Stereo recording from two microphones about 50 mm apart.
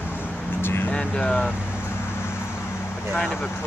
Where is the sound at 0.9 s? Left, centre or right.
Centre.